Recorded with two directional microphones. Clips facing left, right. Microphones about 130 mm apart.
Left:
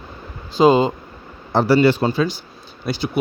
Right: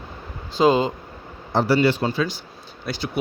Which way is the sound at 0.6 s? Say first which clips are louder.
Left 4 dB; 15° left (ahead or behind).